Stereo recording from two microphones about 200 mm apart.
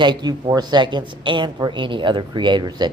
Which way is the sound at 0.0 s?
20° right (ahead or behind).